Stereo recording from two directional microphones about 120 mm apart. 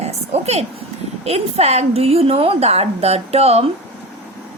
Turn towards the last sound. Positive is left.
turn(degrees=-60)  # may be behind; listen again after turning